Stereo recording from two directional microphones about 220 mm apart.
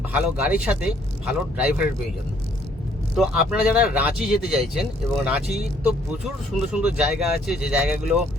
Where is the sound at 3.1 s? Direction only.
Centre (ahead or behind).